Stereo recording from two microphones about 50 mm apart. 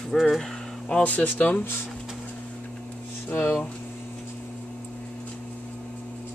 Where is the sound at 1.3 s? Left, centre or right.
Left.